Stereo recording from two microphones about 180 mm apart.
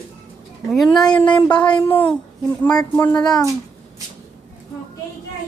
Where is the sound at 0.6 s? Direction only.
Centre (ahead or behind).